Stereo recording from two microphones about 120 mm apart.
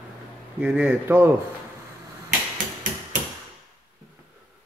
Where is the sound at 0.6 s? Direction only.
10° right (ahead or behind).